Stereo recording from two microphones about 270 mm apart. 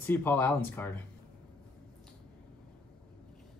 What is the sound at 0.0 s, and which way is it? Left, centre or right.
Speech, centre.